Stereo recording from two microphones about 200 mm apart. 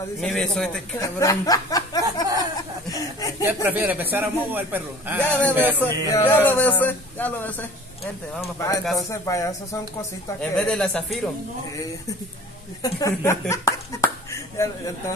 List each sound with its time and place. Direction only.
0.2 s a man's voice: 5° left (ahead or behind)
0.9 s speech: 15° left (ahead or behind)
3.4 s a man's voice: 10° right (ahead or behind)
5.2 s speech: 10° left (ahead or behind)
5.5 s a man's voice: 10° right (ahead or behind)
5.9 s speech: 10° left (ahead or behind)
8.5 s speech: 15° left (ahead or behind)
10.4 s a man's voice: 5° left (ahead or behind)
12.8 s a sound: 15° left (ahead or behind)